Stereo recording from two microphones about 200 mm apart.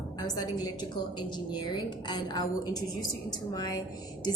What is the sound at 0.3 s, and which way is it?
A woman's voice, 20° left (ahead or behind).